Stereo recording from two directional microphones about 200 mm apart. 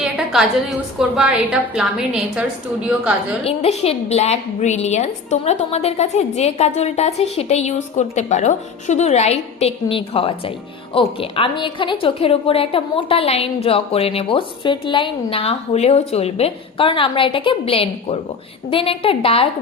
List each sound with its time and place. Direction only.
0.0 s a sound: centre (ahead or behind)
0.9 s a woman's voice: 5° right (ahead or behind)
3.4 s a woman's voice: 30° left (ahead or behind)